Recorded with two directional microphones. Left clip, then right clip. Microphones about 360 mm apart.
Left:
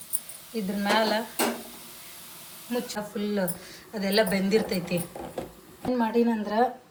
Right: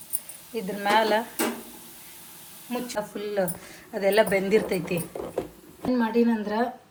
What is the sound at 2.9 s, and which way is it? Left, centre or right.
A woman's voice, right.